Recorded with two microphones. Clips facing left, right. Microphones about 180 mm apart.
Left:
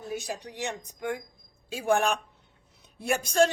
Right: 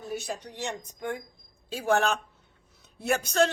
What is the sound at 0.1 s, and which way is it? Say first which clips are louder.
Speech: even; 15° left (ahead or behind).